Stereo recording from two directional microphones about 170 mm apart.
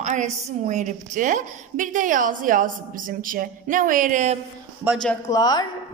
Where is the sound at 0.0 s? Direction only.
45° right (ahead or behind).